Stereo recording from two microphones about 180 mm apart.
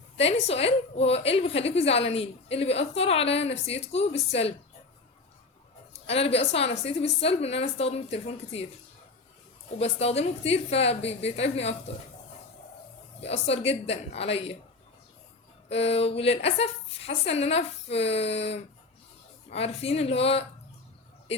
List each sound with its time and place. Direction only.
0.2 s a woman's voice: 35° left (ahead or behind)
5.9 s a woman's voice: 35° left (ahead or behind)
9.7 s a woman's voice: 35° left (ahead or behind)
13.2 s a woman's voice: 35° left (ahead or behind)
15.7 s a woman's voice: 35° left (ahead or behind)